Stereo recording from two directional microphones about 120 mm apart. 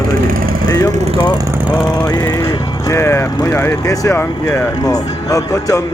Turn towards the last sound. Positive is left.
turn(degrees=30)  # may be behind; listen again after turning